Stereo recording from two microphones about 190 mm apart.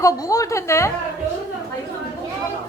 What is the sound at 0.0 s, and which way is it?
Speech, 20° left (ahead or behind).